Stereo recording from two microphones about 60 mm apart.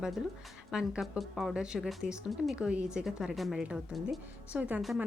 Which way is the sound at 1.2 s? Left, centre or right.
Centre.